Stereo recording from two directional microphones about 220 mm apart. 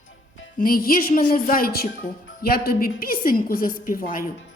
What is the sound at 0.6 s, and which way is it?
Music, 40° left (ahead or behind).